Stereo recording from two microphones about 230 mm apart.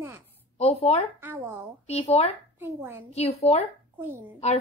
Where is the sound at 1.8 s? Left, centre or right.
Left.